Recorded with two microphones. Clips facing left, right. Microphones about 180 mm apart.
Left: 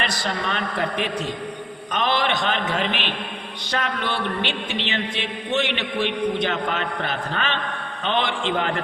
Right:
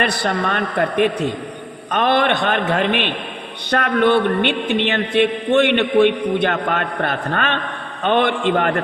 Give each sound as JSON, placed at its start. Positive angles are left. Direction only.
{"t": 0.0, "sound": "speech", "side_deg": -60}